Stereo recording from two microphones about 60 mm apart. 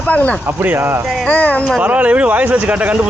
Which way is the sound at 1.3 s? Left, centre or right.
Left.